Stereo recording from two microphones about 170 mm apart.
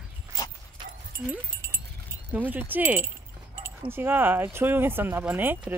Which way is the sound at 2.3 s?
10° right (ahead or behind).